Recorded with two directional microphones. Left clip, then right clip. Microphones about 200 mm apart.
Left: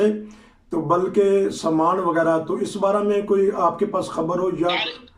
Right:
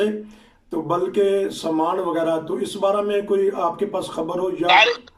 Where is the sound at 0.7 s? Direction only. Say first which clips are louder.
Left 2 dB; centre (ahead or behind).